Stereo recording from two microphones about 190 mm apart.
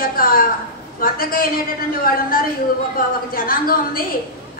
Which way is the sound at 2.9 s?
50° left (ahead or behind).